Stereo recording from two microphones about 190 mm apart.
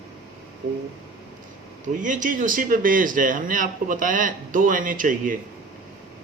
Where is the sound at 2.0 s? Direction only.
40° right (ahead or behind).